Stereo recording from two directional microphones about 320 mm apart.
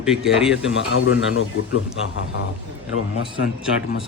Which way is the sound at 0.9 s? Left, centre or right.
Left.